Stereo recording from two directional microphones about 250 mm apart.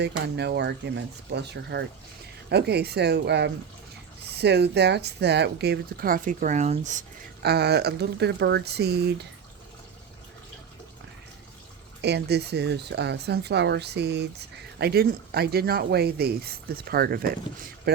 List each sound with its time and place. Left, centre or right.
0.0 s speech: right
7.4 s speech: right
12.0 s speech: right